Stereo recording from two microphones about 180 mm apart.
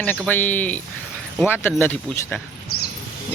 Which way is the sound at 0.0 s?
10° left (ahead or behind).